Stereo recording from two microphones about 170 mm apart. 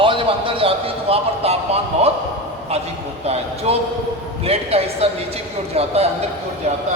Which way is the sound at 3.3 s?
35° right (ahead or behind).